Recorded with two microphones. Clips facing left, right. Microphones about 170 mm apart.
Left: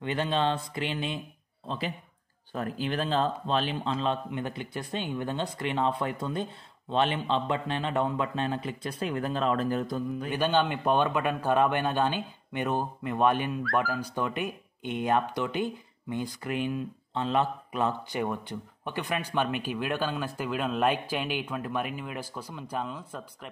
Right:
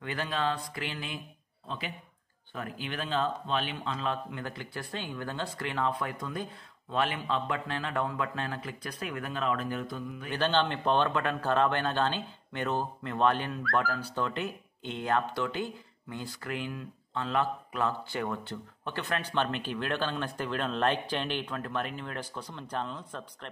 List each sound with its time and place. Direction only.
0.0 s speech: 25° left (ahead or behind)
2.5 s speech: 35° left (ahead or behind)
10.3 s speech: 10° left (ahead or behind)